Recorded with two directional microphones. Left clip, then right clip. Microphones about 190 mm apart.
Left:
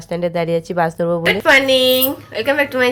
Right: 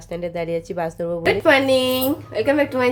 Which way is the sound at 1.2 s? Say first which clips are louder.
Left 3 dB; 5° right (ahead or behind).